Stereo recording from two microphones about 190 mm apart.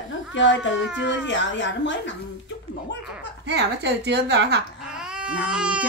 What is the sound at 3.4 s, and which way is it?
A woman's voice, 65° right (ahead or behind).